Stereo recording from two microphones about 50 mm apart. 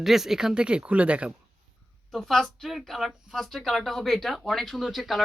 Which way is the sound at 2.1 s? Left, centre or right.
Centre.